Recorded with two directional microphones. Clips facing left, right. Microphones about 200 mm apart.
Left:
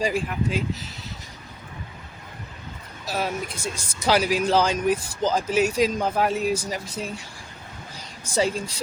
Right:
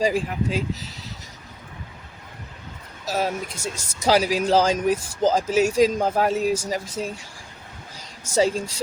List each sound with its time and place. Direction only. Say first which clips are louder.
0.0 s speech: right 2 dB; 40° right (ahead or behind)
3.1 s speech: right 2 dB; 40° right (ahead or behind)
8.2 s speech: right 3 dB; 40° right (ahead or behind)